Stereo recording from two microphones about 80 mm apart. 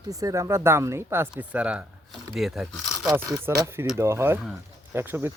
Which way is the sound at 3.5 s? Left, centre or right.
Right.